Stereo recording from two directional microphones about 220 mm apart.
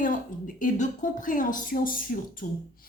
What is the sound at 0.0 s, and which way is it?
A woman's voice, 35° left (ahead or behind).